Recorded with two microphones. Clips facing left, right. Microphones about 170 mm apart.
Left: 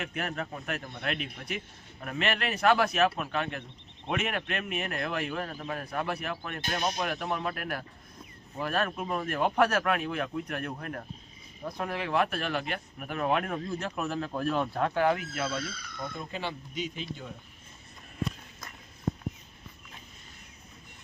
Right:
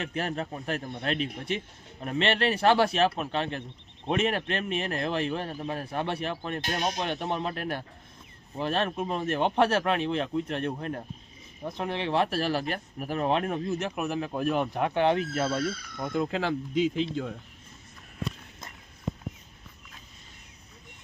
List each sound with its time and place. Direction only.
0.0 s a man's voice: 30° right (ahead or behind)
16.1 s speech: 90° right